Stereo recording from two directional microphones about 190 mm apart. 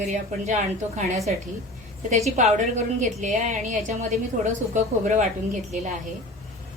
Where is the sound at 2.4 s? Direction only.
40° right (ahead or behind).